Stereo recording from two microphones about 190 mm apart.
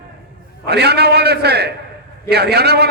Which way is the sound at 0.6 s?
60° right (ahead or behind).